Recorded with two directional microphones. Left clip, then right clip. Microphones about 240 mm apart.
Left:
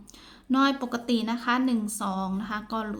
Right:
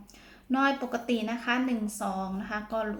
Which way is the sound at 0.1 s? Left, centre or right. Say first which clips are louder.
Left 3 dB; left.